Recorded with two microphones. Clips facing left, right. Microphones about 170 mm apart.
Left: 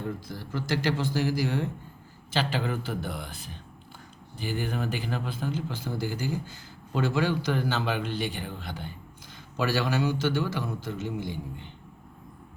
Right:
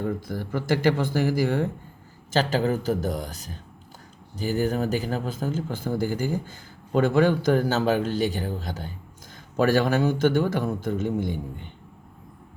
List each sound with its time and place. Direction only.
0.3 s a man's voice: 50° right (ahead or behind)